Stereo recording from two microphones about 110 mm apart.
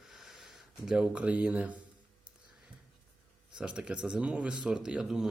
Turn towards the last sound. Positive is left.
turn(degrees=-5)  # may be behind; listen again after turning